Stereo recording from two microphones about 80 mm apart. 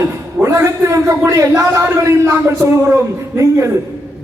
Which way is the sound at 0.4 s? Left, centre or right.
Right.